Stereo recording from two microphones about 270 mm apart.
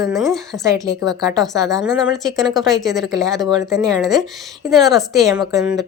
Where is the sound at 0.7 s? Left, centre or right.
Centre.